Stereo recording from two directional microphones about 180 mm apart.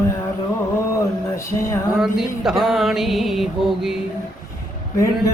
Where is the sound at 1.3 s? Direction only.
15° left (ahead or behind).